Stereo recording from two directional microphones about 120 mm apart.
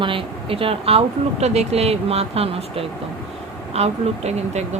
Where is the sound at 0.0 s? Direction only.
45° right (ahead or behind).